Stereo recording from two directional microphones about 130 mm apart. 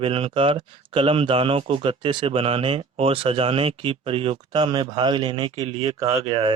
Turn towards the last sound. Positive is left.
turn(degrees=-30)  # may be behind; listen again after turning